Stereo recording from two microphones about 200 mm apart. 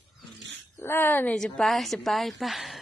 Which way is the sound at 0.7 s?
10° left (ahead or behind).